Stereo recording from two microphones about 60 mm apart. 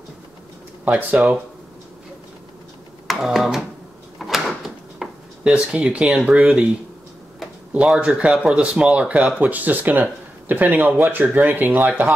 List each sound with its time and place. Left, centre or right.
0.8 s speech: right
3.1 s a sound: centre
4.2 s door: centre
4.6 s a sound: centre
5.4 s speech: centre
7.9 s speech: centre